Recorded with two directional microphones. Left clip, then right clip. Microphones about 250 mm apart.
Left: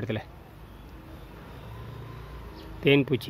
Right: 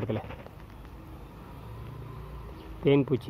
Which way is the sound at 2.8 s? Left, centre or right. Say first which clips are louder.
Left 2 dB; centre.